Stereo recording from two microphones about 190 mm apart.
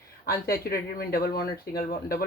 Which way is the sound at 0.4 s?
50° left (ahead or behind).